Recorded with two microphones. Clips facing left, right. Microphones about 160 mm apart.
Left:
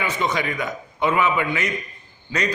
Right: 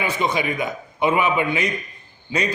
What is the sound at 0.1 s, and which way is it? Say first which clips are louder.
A man's voice: right 2 dB; 15° right (ahead or behind).